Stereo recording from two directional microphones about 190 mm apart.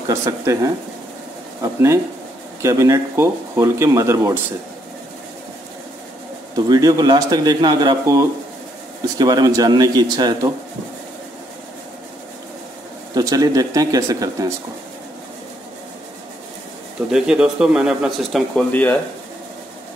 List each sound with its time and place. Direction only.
0.1 s speech: 15° right (ahead or behind)
6.5 s a man's voice: 20° right (ahead or behind)
13.1 s speech: 20° right (ahead or behind)
17.1 s speech: 5° right (ahead or behind)
18.7 s speech: 10° left (ahead or behind)